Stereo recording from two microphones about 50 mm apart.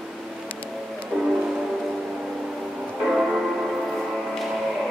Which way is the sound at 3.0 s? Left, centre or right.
Centre.